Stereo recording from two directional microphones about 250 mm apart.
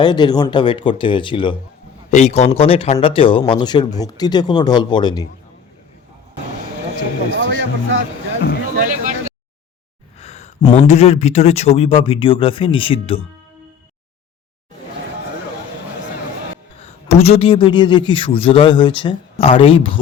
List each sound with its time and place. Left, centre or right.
0.0 s speech: centre
7.3 s music: right
8.7 s vehicle: right
10.2 s speech: left
16.8 s speech: left